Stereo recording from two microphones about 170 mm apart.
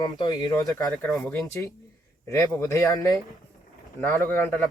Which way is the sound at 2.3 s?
20° left (ahead or behind).